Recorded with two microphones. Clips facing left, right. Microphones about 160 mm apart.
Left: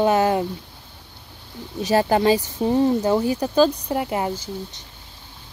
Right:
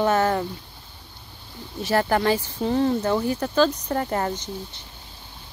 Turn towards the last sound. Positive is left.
turn(degrees=10)  # may be behind; listen again after turning